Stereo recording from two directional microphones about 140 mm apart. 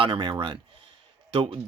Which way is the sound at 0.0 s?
35° right (ahead or behind).